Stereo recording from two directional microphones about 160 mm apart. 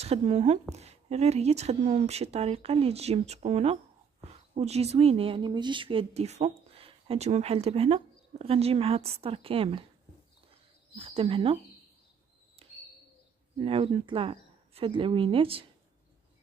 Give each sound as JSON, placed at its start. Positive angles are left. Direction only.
{"t": 0.0, "sound": "speech", "side_deg": -40}
{"t": 11.0, "sound": "speech", "side_deg": -35}
{"t": 13.6, "sound": "speech", "side_deg": -35}